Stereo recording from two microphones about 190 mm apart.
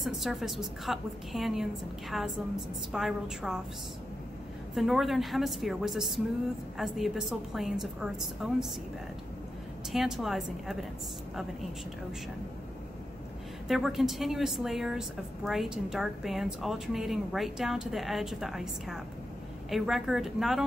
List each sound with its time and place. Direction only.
0.0 s a woman's voice: centre (ahead or behind)
4.7 s a woman's voice: centre (ahead or behind)
9.9 s a woman's voice: centre (ahead or behind)
13.7 s a woman's voice: centre (ahead or behind)